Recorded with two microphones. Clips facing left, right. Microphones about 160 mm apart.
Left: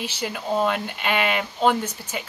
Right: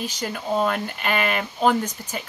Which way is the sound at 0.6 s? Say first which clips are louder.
Even; 5° left (ahead or behind).